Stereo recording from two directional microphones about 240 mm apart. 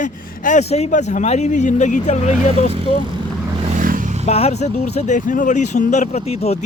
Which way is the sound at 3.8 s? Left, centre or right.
Right.